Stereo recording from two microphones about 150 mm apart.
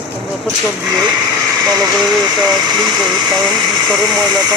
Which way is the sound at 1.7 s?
25° right (ahead or behind).